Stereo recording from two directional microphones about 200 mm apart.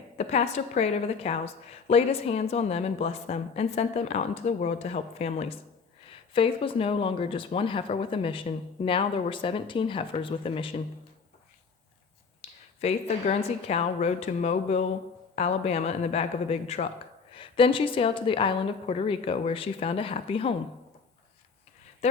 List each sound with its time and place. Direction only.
0.2 s a woman's voice: 35° left (ahead or behind)
12.4 s a woman's voice: 30° left (ahead or behind)